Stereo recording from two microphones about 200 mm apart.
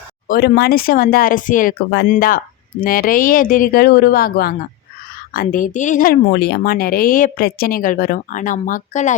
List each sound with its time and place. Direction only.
0.3 s speech: 55° left (ahead or behind); by 9.1 s 35° left (ahead or behind)